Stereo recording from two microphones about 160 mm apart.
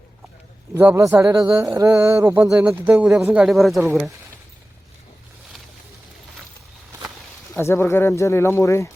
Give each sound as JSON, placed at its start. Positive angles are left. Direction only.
{"t": 0.7, "sound": "a man's voice", "side_deg": -15}
{"t": 3.4, "sound": "speech", "side_deg": 0}
{"t": 7.5, "sound": "speech", "side_deg": 15}